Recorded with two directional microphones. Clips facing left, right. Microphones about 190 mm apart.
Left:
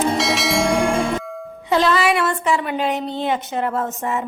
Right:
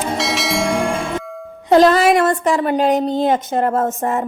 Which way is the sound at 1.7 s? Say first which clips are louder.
Right 6 dB; 45° right (ahead or behind).